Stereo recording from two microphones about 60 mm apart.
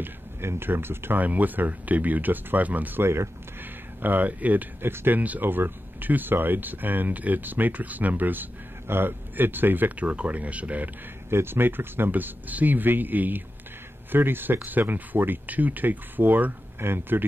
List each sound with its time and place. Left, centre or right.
0.0 s speech: right
1.2 s speech: right
3.0 s speech: right
4.0 s speech: right
11.2 s speech: right
16.8 s speech: right